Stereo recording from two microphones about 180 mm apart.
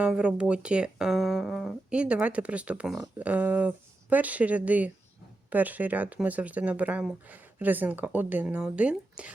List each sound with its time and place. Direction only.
0.0 s speech: 5° right (ahead or behind)